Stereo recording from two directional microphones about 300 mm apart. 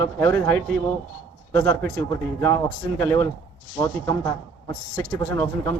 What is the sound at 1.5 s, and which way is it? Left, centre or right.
A man's voice, centre.